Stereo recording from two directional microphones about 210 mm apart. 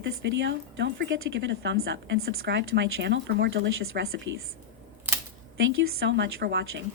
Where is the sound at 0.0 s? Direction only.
60° right (ahead or behind).